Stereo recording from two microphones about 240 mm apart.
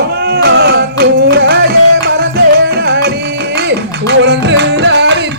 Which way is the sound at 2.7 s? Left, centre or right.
Right.